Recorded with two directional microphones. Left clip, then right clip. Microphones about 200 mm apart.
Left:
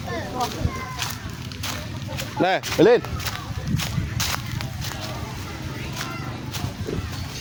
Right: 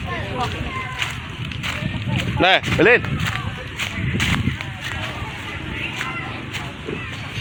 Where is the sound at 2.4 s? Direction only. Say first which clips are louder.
Right 3 dB; 10° left (ahead or behind).